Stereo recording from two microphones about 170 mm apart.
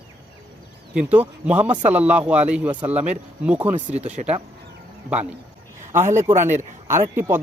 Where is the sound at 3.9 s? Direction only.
40° right (ahead or behind).